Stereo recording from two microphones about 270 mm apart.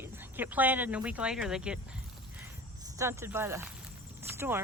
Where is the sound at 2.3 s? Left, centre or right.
Centre.